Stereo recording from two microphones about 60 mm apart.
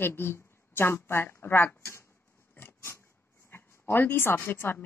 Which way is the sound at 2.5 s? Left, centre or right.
Left.